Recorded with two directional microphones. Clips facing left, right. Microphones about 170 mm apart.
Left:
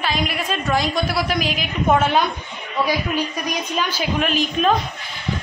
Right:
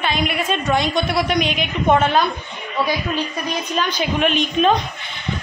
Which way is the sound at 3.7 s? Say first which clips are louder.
Right 2 dB; 5° left (ahead or behind).